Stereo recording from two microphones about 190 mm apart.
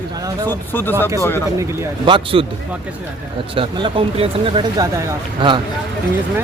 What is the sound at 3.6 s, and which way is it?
Speech, 30° right (ahead or behind).